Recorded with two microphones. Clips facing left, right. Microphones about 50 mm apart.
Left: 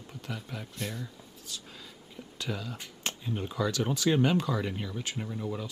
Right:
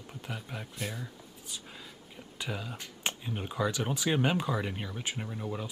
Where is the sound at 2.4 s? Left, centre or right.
Centre.